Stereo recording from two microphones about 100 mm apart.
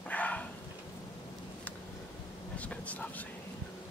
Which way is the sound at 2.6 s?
15° left (ahead or behind).